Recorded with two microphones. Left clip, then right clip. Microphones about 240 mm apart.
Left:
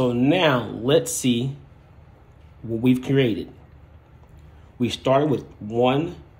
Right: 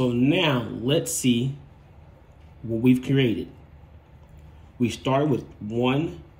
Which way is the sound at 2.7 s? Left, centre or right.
Centre.